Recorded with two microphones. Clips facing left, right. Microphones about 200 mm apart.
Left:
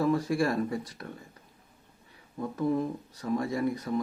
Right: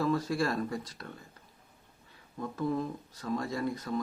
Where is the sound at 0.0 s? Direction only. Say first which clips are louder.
Left 3 dB; 10° left (ahead or behind).